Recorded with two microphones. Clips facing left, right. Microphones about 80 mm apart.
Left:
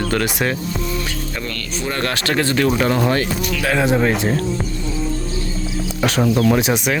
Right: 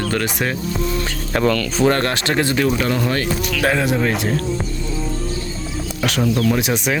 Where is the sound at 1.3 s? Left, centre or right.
Right.